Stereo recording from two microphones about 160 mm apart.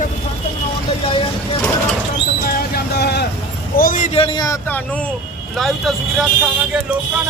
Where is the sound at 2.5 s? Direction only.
70° left (ahead or behind); by 3.2 s 90° left.